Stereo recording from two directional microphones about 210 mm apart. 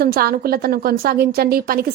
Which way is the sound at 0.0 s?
45° right (ahead or behind).